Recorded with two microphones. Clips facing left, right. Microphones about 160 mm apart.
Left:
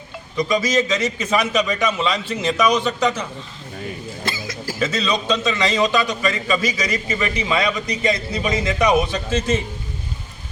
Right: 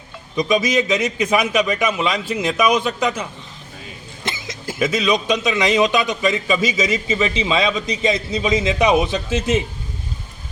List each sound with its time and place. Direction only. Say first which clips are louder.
0.3 s a man's voice: right 1 dB; 20° right (ahead or behind)
4.3 s a sound: right 1 dB; 20° right (ahead or behind)
4.8 s a man's voice: right 3 dB; 10° right (ahead or behind)